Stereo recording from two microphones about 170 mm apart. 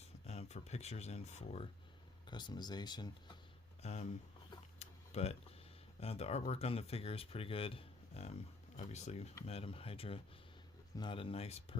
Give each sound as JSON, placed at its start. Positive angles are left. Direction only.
{"t": 0.3, "sound": "speech", "side_deg": 40}
{"t": 2.2, "sound": "speech", "side_deg": 25}
{"t": 3.8, "sound": "speech", "side_deg": 40}
{"t": 4.8, "sound": "tick-tock", "side_deg": 40}
{"t": 6.0, "sound": "speech", "side_deg": 35}